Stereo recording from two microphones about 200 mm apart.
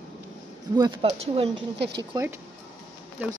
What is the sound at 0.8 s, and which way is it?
Speech, 20° right (ahead or behind).